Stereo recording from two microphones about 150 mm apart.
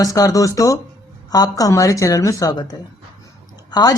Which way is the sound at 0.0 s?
25° left (ahead or behind).